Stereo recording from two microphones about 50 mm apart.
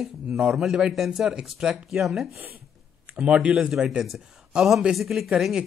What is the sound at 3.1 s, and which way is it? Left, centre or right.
Speech, right.